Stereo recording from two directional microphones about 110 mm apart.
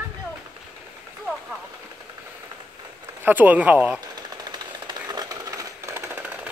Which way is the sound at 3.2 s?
15° right (ahead or behind).